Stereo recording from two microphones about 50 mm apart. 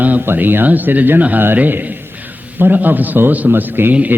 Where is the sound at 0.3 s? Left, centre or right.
Right.